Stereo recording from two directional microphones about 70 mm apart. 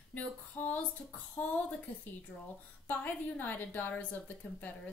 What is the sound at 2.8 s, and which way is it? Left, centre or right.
A woman's voice, left.